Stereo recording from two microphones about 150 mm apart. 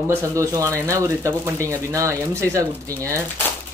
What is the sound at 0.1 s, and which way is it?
Speech, 20° right (ahead or behind).